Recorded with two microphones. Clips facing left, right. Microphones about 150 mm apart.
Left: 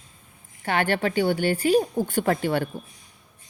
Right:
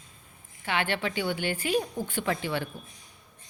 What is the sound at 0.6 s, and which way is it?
A woman's voice, 45° left (ahead or behind).